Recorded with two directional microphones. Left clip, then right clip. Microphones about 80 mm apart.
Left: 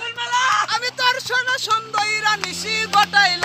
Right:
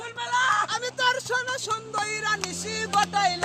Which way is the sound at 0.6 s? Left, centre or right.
Right.